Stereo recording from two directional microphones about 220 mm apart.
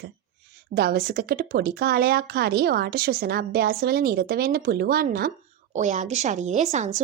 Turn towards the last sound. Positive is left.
turn(degrees=-30)  # may be behind; listen again after turning